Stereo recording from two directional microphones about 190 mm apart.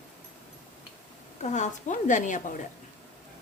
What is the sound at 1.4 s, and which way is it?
Speech, 40° left (ahead or behind).